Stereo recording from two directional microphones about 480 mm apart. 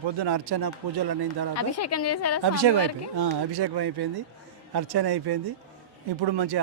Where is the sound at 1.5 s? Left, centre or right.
Left.